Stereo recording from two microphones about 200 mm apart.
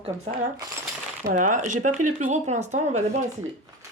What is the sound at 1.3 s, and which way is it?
A woman's voice, 40° right (ahead or behind).